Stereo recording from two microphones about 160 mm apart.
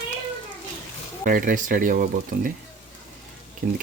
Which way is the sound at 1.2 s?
60° right (ahead or behind).